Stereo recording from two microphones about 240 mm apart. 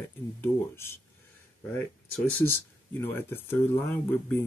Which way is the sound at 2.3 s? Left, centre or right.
Centre.